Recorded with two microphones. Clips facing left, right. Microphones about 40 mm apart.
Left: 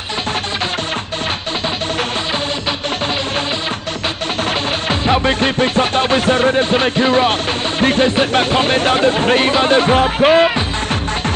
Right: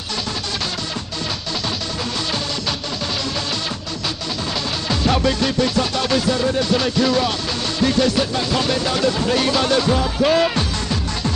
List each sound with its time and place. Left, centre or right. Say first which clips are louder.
4.8 s speech: left 3 dB; left